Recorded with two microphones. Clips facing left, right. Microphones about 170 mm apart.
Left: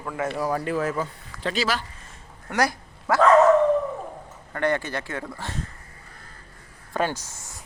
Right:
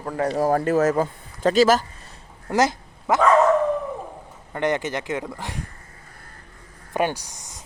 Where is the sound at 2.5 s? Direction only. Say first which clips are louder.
Right 4 dB; 20° right (ahead or behind).